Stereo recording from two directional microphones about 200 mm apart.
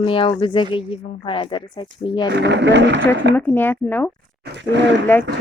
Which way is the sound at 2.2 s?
60° right (ahead or behind).